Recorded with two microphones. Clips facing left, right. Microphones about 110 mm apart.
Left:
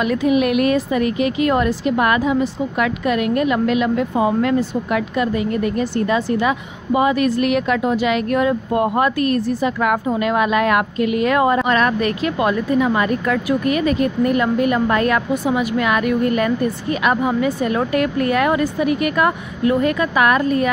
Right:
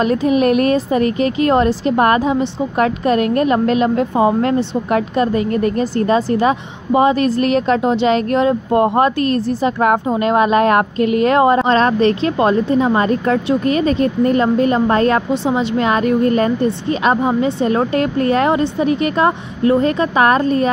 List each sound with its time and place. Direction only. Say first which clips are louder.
0.0 s a woman's voice: right 3 dB; 35° right (ahead or behind)